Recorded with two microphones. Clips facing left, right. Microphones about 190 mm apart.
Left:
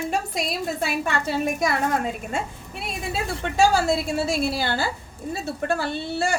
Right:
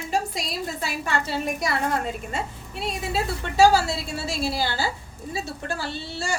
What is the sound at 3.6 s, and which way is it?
A woman's voice, 55° left (ahead or behind).